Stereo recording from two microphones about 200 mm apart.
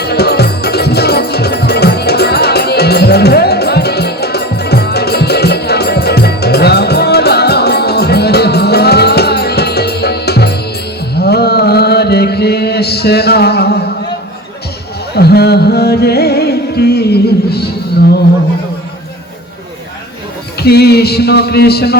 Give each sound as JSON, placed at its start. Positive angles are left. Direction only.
{"t": 0.0, "sound": "music", "side_deg": 55}
{"t": 11.1, "sound": "mantra", "side_deg": 55}
{"t": 15.1, "sound": "music", "side_deg": 55}
{"t": 20.6, "sound": "music", "side_deg": 50}